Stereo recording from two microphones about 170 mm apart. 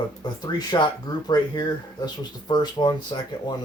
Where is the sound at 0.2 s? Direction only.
25° left (ahead or behind).